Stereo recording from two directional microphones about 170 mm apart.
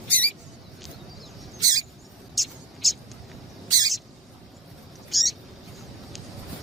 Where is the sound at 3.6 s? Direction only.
20° right (ahead or behind).